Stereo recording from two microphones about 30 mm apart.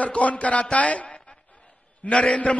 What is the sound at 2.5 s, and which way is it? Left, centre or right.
Speech, left.